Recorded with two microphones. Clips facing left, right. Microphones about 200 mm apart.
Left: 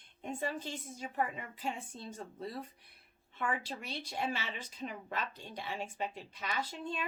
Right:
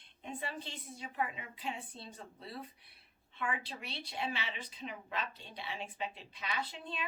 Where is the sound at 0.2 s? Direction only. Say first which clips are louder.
Left 5 dB; 45° left (ahead or behind).